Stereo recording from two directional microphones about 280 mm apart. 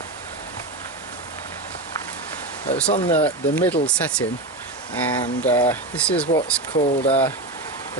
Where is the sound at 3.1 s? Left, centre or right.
Centre.